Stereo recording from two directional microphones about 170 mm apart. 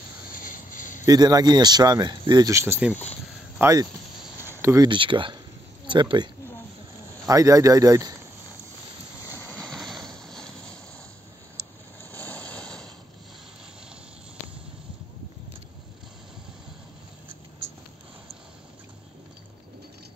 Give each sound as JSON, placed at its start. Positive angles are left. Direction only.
{"t": 0.4, "sound": "a sound", "side_deg": 50}
{"t": 1.0, "sound": "speech", "side_deg": -20}
{"t": 4.4, "sound": "a sound", "side_deg": -15}
{"t": 4.8, "sound": "speech", "side_deg": -30}
{"t": 9.2, "sound": "vehicle", "side_deg": 15}
{"t": 9.6, "sound": "vehicle", "side_deg": 0}
{"t": 12.0, "sound": "vehicle", "side_deg": 10}